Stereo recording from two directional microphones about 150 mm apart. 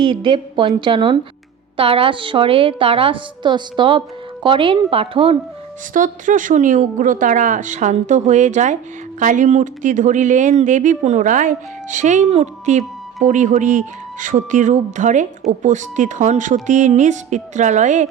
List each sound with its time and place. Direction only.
0.0 s a woman's voice: 35° right (ahead or behind)
5.9 s a woman's voice: 60° right (ahead or behind)